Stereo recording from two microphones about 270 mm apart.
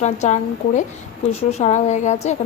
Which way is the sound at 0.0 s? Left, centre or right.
Left.